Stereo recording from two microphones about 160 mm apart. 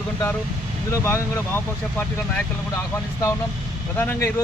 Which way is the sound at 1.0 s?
15° left (ahead or behind).